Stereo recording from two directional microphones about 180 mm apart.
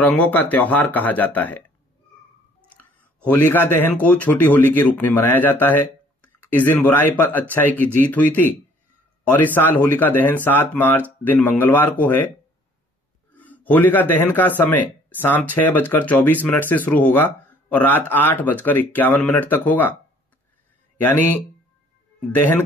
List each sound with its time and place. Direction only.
0.0 s speech: 10° left (ahead or behind)
2.8 s speech: 10° left (ahead or behind)
13.3 s a man's voice: 10° left (ahead or behind)
21.0 s speech: 10° left (ahead or behind)